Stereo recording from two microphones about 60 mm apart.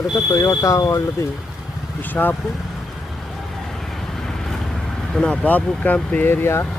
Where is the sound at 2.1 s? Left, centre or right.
Left.